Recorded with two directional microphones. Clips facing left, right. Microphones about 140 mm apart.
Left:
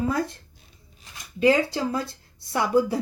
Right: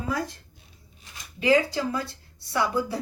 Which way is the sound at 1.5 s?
25° left (ahead or behind).